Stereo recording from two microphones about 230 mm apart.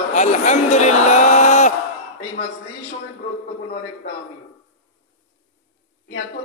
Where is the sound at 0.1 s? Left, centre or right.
Left.